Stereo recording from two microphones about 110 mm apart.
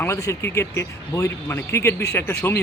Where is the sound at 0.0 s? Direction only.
25° left (ahead or behind).